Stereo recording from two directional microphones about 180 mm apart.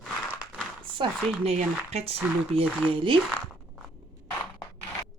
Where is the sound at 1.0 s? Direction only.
30° right (ahead or behind).